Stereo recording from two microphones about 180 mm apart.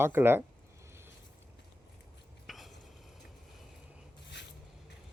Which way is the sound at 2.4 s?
Centre (ahead or behind).